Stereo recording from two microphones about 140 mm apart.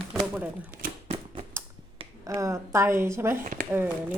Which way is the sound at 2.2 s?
20° right (ahead or behind).